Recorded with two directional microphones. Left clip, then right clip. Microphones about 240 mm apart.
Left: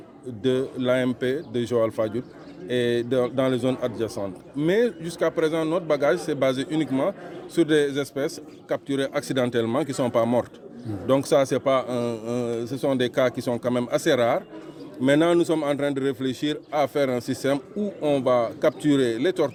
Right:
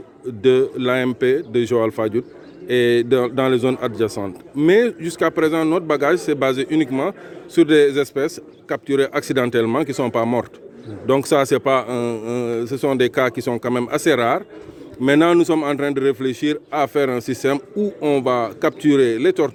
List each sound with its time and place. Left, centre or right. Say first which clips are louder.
0.4 s a man's voice: right 8 dB; right